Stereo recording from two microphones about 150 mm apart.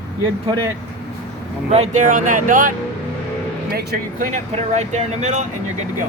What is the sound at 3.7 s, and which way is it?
Speech, 90° right.